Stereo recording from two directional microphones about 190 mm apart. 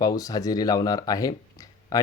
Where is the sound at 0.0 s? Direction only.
20° left (ahead or behind).